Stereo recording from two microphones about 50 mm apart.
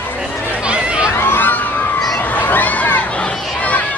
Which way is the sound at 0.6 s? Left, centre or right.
Right.